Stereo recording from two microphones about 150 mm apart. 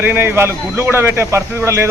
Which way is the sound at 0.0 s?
15° right (ahead or behind).